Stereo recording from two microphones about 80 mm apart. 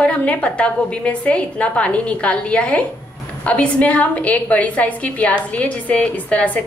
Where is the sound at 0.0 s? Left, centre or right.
Centre.